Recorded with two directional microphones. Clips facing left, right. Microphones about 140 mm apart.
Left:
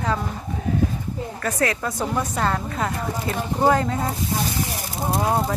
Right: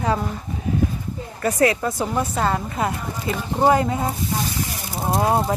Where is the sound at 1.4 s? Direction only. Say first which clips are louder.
Right 5 dB; 10° right (ahead or behind).